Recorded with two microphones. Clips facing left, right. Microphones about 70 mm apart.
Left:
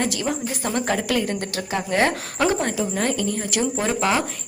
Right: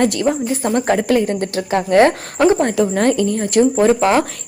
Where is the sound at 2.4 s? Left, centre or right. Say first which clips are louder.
Right 8 dB; right.